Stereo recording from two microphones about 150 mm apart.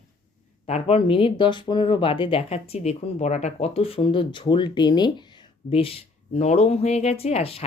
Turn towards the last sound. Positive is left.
turn(degrees=40)  # may be behind; listen again after turning